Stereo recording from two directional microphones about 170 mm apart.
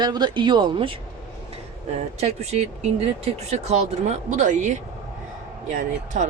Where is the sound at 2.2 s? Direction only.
40° right (ahead or behind).